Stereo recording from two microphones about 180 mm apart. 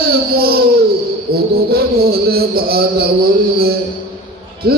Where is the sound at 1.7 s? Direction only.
60° right (ahead or behind).